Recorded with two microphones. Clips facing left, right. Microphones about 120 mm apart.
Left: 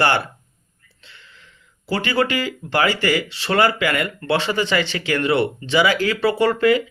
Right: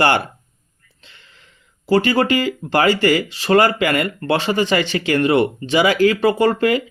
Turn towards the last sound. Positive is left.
turn(degrees=-45)  # may be behind; listen again after turning